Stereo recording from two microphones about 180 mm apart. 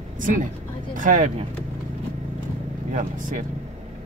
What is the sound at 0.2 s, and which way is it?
Speech, 45° right (ahead or behind).